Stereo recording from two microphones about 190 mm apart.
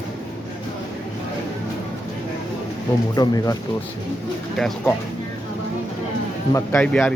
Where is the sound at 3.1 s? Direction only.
20° left (ahead or behind).